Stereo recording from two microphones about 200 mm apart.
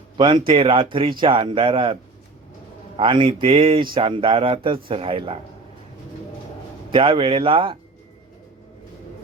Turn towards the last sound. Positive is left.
turn(degrees=-25)  # may be behind; listen again after turning